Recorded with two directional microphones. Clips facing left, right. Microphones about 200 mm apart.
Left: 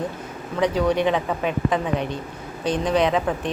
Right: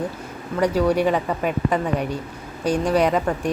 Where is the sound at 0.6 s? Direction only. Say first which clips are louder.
Right 1 dB; 10° right (ahead or behind).